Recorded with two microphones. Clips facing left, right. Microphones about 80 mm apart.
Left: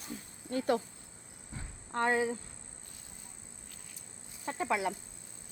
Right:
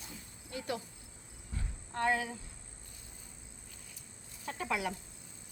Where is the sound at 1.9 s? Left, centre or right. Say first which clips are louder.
Left 3 dB; left.